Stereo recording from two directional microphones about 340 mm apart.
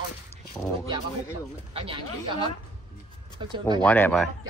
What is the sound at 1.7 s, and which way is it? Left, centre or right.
Speech, centre.